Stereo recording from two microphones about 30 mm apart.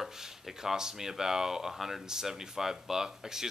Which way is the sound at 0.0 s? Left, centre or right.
Centre.